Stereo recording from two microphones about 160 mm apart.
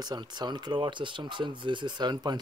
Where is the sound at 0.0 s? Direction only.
25° right (ahead or behind).